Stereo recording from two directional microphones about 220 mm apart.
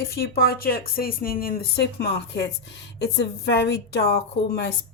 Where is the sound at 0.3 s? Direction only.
45° left (ahead or behind).